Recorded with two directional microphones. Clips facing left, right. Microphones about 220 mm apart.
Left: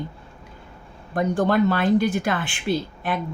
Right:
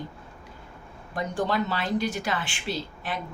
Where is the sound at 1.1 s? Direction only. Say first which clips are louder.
Left 7 dB; 55° left (ahead or behind).